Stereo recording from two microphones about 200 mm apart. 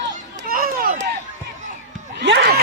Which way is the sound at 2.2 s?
55° right (ahead or behind).